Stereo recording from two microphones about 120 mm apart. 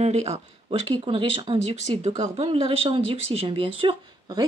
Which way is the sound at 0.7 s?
50° right (ahead or behind).